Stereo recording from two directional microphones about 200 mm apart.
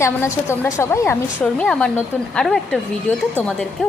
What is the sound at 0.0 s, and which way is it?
A woman's voice, 15° left (ahead or behind).